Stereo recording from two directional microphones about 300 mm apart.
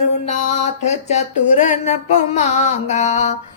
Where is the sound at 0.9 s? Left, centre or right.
Left.